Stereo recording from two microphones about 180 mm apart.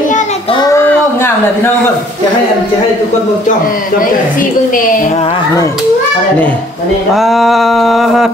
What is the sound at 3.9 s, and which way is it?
A woman's voice, 50° left (ahead or behind).